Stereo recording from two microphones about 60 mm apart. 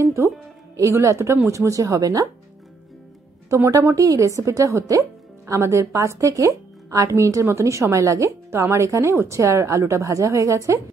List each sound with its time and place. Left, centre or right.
0.0 s music: right
0.7 s speech: right
3.4 s a woman's voice: right
5.5 s a woman's voice: right
7.1 s a woman's voice: right